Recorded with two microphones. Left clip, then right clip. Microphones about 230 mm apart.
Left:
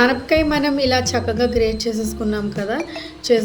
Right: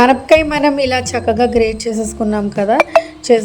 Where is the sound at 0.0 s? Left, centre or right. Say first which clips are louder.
Right 6 dB; right.